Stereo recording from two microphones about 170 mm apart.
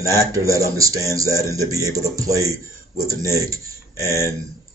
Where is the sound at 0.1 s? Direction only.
20° right (ahead or behind).